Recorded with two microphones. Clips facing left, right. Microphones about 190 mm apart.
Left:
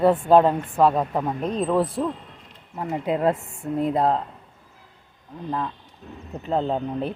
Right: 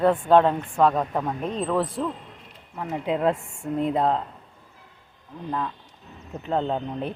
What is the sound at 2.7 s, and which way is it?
Speech, 20° left (ahead or behind).